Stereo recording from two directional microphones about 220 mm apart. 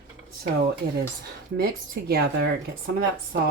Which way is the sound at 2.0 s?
45° right (ahead or behind).